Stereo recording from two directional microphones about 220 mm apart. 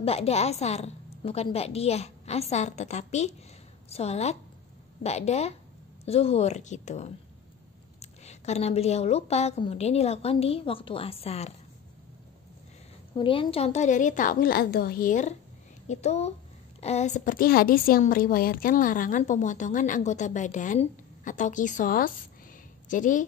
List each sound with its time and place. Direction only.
0.0 s a woman's voice: 25° left (ahead or behind)
13.1 s a woman's voice: 25° left (ahead or behind)